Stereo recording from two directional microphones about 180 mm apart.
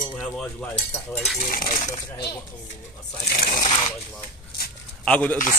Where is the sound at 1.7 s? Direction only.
35° left (ahead or behind).